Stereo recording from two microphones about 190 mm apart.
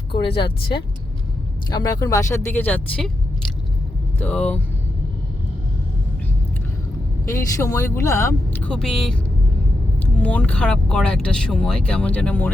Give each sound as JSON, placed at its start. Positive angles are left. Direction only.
{"t": 0.3, "sound": "speech", "side_deg": 25}
{"t": 4.2, "sound": "speech", "side_deg": 10}
{"t": 7.3, "sound": "speech", "side_deg": 15}
{"t": 8.7, "sound": "speech", "side_deg": 5}